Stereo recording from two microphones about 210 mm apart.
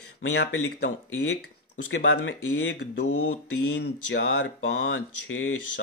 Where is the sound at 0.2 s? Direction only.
65° left (ahead or behind).